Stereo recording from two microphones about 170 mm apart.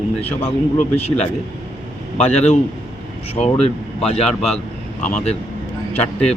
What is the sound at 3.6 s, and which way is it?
Speech, 35° left (ahead or behind).